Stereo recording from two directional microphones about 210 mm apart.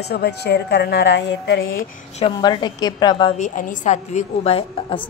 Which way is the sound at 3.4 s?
35° left (ahead or behind).